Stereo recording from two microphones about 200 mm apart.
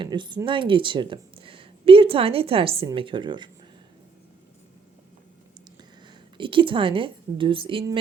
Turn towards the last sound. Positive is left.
turn(degrees=-25)  # may be behind; listen again after turning